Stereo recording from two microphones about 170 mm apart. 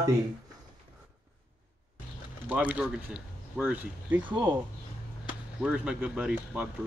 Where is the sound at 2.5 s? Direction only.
5° right (ahead or behind).